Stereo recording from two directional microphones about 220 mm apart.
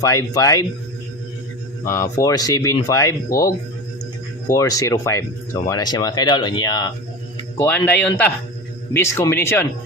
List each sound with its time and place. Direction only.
0.0 s speech: 15° left (ahead or behind)
1.8 s speech: 15° left (ahead or behind)
4.4 s speech: 15° left (ahead or behind)